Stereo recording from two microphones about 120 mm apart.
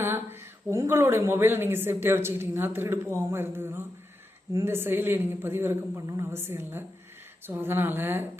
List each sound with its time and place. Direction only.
0.0 s speech: 20° right (ahead or behind)